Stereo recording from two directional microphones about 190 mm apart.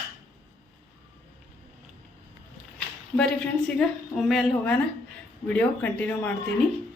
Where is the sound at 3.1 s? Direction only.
5° left (ahead or behind).